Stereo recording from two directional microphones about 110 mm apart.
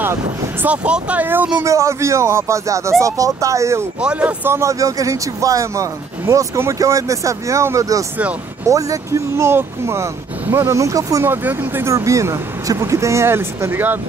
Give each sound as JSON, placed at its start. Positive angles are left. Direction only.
{"t": 0.0, "sound": "speech", "side_deg": -20}
{"t": 1.6, "sound": "speech", "side_deg": -30}
{"t": 4.0, "sound": "speech", "side_deg": -10}
{"t": 4.5, "sound": "speech", "side_deg": -25}
{"t": 11.2, "sound": "speech", "side_deg": -20}